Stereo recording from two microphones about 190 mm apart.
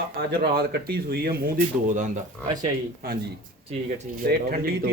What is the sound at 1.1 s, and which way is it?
Speech, 50° right (ahead or behind).